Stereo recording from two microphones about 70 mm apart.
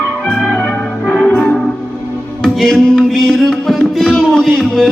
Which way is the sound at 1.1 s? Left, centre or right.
Centre.